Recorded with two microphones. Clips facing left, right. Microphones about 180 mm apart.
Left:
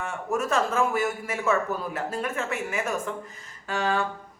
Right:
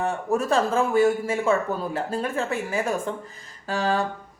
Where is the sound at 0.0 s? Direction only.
35° right (ahead or behind).